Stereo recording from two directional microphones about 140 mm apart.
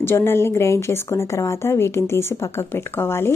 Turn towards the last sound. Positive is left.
turn(degrees=15)  # may be behind; listen again after turning